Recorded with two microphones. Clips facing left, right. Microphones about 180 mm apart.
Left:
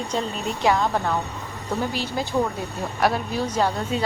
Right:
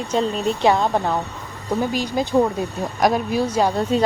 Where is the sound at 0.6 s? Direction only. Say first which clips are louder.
Right 2 dB; 25° right (ahead or behind); by 3.7 s 10° right (ahead or behind).